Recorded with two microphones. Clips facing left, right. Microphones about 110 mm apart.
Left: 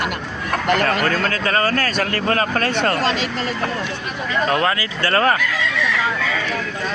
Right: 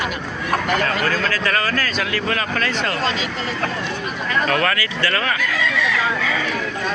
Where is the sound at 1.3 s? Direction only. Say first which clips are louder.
Left 2 dB; 30° left (ahead or behind).